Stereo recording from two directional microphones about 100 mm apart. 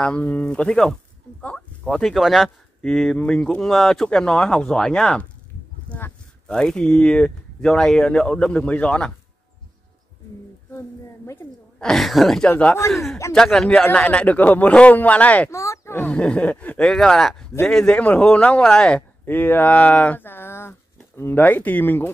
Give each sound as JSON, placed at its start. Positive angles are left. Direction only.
{"t": 0.0, "sound": "speech", "side_deg": 10}
{"t": 2.1, "sound": "speech", "side_deg": 0}
{"t": 5.9, "sound": "a sound", "side_deg": 20}
{"t": 6.4, "sound": "speech", "side_deg": 5}
{"t": 11.8, "sound": "speech", "side_deg": 0}
{"t": 12.4, "sound": "speech", "side_deg": 15}
{"t": 12.9, "sound": "speech", "side_deg": 0}
{"t": 15.5, "sound": "speech", "side_deg": 30}
{"t": 16.0, "sound": "speech", "side_deg": 10}
{"t": 19.2, "sound": "speech", "side_deg": 20}